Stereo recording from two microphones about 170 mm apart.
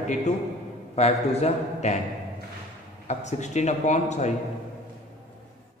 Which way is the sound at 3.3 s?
45° left (ahead or behind).